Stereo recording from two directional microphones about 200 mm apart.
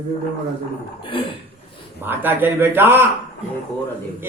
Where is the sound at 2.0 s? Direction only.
10° right (ahead or behind).